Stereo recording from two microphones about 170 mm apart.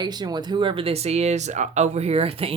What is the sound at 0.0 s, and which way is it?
Speech, 25° right (ahead or behind).